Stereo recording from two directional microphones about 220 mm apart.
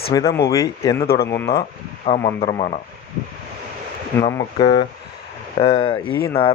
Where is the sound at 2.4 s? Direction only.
25° left (ahead or behind).